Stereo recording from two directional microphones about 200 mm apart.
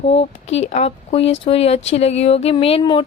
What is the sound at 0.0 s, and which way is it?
Speech, 30° left (ahead or behind).